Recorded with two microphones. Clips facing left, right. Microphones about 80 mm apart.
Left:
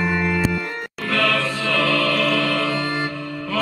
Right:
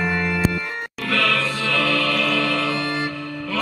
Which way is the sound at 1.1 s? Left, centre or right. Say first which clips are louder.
Left 1 dB; left.